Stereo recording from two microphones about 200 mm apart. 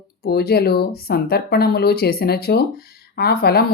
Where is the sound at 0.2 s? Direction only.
50° left (ahead or behind).